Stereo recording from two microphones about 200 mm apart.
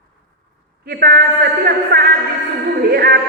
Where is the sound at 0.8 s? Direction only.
50° right (ahead or behind).